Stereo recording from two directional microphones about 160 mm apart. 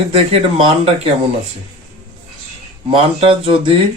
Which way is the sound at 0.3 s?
40° right (ahead or behind).